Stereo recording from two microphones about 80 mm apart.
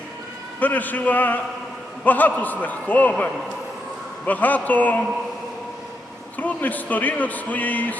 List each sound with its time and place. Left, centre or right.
0.6 s speech: left
4.3 s speech: left
6.3 s speech: left